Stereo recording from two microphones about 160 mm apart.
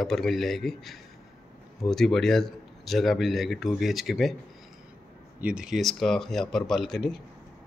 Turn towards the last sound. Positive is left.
turn(degrees=0)  # may be behind; listen again after turning